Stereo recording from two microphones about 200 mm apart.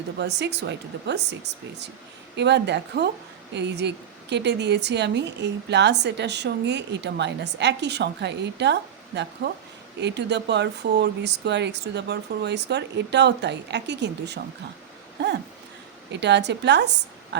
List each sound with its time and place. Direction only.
0.2 s a woman's voice: 60° right (ahead or behind)